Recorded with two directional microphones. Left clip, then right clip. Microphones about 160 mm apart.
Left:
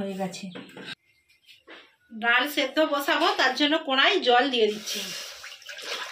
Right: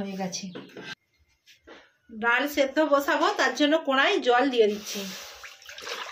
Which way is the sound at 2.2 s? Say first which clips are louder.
Even; 75° right (ahead or behind).